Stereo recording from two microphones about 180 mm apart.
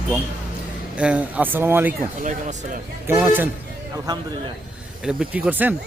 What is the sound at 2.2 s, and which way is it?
Speech, 45° right (ahead or behind).